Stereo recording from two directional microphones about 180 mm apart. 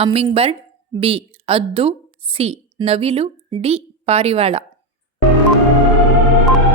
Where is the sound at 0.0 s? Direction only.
30° right (ahead or behind).